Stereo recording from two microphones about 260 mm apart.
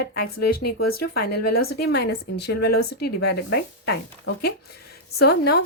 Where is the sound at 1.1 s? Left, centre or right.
Left.